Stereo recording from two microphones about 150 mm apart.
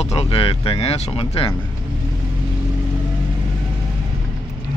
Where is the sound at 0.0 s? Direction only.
40° left (ahead or behind).